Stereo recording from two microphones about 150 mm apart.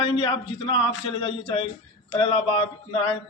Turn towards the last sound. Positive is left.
turn(degrees=35)  # may be behind; listen again after turning